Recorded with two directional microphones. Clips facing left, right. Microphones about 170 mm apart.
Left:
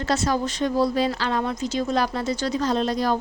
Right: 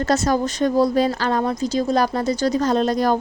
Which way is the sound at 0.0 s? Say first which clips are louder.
Right 4 dB; 45° right (ahead or behind).